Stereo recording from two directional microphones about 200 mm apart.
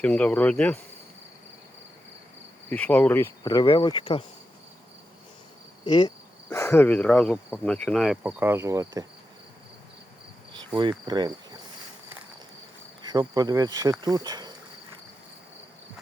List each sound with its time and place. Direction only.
0.0 s speech: 5° left (ahead or behind)
2.6 s insect: 10° left (ahead or behind); by 4.3 s 25° left (ahead or behind)
5.8 s speech: 25° left (ahead or behind); by 7.8 s 5° left (ahead or behind)
7.9 s insect: centre (ahead or behind); by 9.0 s 15° right (ahead or behind)
10.8 s cricket: 20° right (ahead or behind)
13.0 s insect: 20° right (ahead or behind)
14.0 s cricket: 20° right (ahead or behind)